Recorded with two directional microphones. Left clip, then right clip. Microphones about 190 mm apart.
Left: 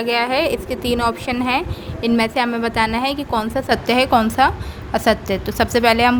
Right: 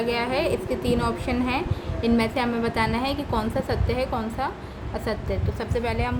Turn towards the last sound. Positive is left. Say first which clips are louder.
# left 12 dB
turn(degrees=60)  # may be behind; listen again after turning